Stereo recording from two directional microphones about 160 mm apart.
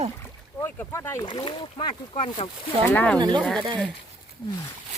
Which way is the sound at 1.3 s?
30° left (ahead or behind).